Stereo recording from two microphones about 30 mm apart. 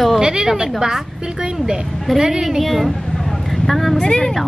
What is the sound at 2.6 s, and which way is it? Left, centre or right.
A woman's voice, centre.